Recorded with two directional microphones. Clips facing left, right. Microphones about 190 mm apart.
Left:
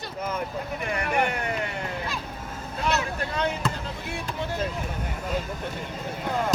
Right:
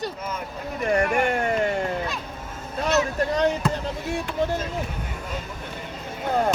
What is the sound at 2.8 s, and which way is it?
Vehicle, 40° right (ahead or behind).